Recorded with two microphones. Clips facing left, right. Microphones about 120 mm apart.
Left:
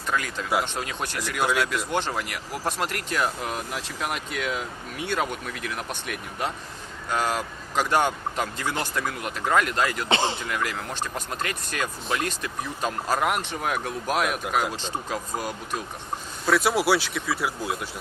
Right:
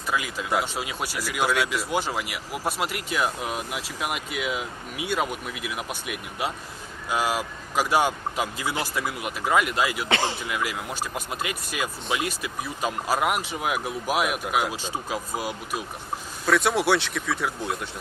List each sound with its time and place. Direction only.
0.1 s speech: 5° right (ahead or behind)
10.1 s speech: 25° left (ahead or behind)
10.4 s speech: 10° right (ahead or behind)
16.5 s speech: centre (ahead or behind)